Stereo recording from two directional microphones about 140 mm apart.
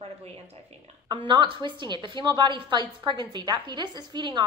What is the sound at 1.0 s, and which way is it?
A woman's voice, 35° right (ahead or behind).